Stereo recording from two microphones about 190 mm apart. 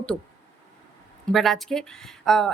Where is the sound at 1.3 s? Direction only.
Centre (ahead or behind).